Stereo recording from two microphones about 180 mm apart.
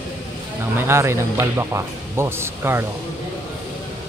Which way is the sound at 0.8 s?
15° right (ahead or behind).